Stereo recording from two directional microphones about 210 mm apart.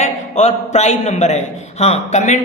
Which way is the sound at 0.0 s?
35° left (ahead or behind).